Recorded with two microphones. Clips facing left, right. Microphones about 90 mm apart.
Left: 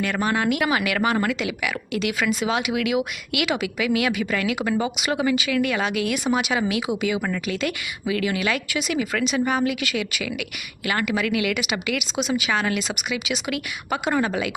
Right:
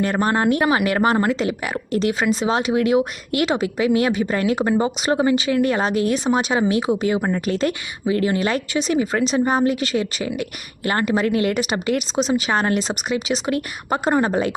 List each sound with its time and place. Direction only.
0.0 s speech: 35° right (ahead or behind)